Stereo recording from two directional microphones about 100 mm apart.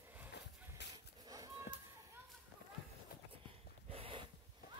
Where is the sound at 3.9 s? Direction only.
65° right (ahead or behind).